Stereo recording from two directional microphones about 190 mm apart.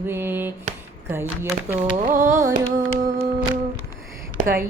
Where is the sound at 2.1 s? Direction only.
15° right (ahead or behind).